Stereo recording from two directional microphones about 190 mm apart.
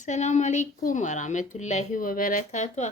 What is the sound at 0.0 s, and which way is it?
A woman's voice, 40° left (ahead or behind).